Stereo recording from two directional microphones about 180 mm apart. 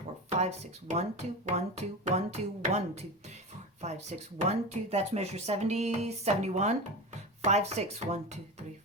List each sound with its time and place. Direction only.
0.3 s speech: 40° right (ahead or behind)